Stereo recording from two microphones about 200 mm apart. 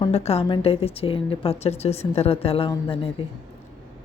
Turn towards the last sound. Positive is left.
turn(degrees=25)  # may be behind; listen again after turning